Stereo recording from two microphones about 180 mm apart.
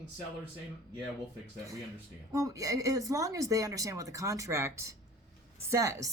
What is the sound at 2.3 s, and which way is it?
A woman's voice, 20° right (ahead or behind).